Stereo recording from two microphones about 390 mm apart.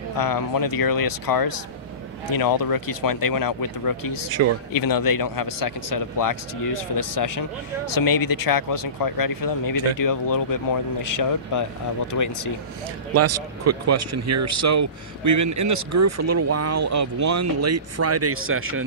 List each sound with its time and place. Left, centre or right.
0.2 s speech: left
4.4 s speech: right
4.7 s speech: left
13.1 s speech: right